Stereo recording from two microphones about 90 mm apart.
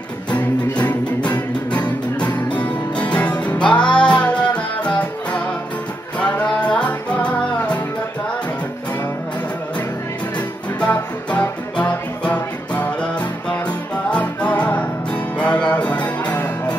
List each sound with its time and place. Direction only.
0.4 s music: 15° left (ahead or behind)
10.8 s music: 15° left (ahead or behind)
14.1 s music: 15° left (ahead or behind)